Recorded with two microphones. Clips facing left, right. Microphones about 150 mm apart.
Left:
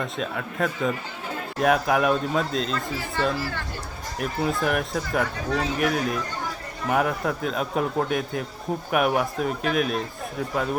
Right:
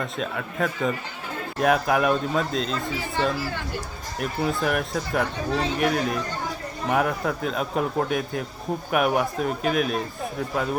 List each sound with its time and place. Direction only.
0.0 s speech: centre (ahead or behind)
2.9 s speech: 15° right (ahead or behind)
4.2 s speech: centre (ahead or behind)